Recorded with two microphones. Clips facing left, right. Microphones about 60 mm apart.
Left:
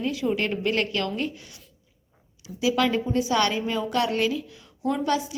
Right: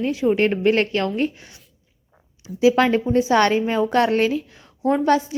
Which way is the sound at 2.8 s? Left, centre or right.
Right.